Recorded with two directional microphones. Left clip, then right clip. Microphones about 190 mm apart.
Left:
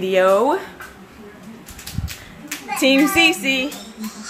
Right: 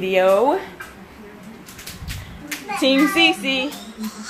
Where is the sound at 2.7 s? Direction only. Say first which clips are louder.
Left 1 dB; 35° left (ahead or behind).